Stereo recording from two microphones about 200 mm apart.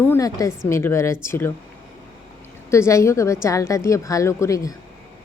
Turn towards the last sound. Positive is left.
turn(degrees=15)  # may be behind; listen again after turning